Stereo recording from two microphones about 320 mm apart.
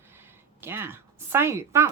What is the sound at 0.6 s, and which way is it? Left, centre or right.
Rub, centre.